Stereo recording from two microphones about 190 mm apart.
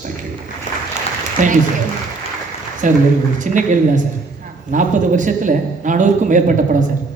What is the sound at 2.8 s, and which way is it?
A man's voice, 40° right (ahead or behind).